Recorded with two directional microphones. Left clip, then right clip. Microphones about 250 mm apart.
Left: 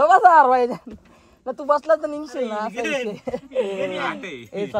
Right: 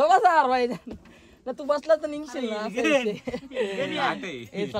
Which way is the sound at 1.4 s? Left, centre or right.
Left.